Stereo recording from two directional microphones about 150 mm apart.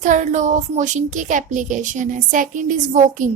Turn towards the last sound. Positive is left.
turn(degrees=-55)  # may be behind; listen again after turning